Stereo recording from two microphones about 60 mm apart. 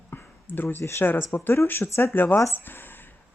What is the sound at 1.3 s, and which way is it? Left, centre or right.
A woman's voice, left.